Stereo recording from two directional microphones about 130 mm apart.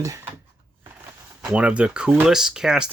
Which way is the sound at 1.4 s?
10° right (ahead or behind).